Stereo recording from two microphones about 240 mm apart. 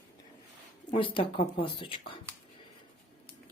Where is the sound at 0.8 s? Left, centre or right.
Left.